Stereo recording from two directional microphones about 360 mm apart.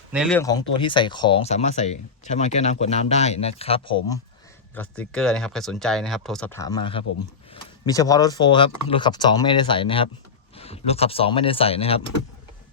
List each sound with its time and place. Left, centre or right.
0.1 s speech: centre